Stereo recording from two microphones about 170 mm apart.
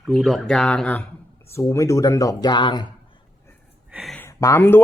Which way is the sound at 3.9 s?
5° right (ahead or behind).